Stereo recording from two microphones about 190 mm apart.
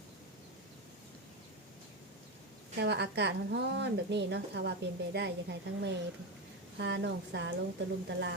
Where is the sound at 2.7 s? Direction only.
65° right (ahead or behind).